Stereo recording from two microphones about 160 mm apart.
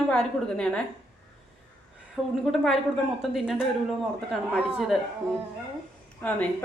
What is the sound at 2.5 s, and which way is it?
Speech, centre (ahead or behind).